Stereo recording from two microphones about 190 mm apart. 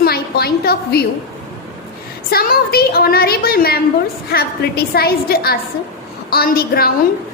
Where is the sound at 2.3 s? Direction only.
50° left (ahead or behind).